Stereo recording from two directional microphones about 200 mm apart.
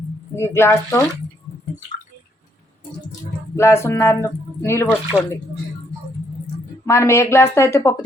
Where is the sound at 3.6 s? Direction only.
15° left (ahead or behind).